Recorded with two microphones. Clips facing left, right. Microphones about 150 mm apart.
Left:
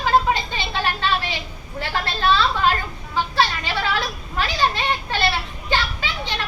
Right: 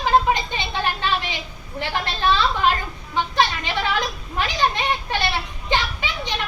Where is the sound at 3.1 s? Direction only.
20° right (ahead or behind).